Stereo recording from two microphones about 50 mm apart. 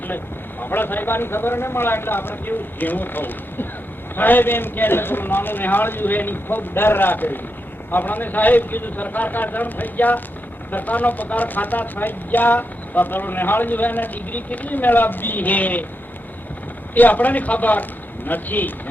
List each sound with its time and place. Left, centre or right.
0.6 s a man's voice: left
16.9 s speech: left